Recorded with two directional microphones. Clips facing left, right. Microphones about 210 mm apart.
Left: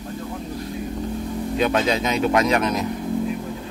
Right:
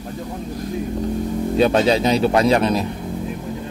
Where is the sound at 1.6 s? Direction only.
35° right (ahead or behind).